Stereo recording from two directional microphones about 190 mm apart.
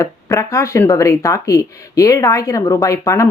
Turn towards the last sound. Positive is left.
turn(degrees=15)  # may be behind; listen again after turning